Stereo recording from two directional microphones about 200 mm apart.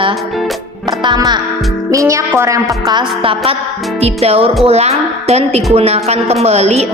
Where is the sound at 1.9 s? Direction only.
15° right (ahead or behind).